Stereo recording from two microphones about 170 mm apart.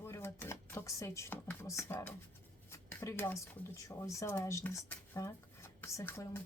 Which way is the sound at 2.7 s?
15° left (ahead or behind).